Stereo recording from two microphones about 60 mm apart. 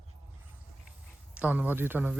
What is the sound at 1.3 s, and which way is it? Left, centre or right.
Speech, right.